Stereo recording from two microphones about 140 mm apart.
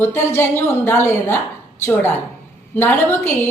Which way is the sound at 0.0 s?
15° left (ahead or behind).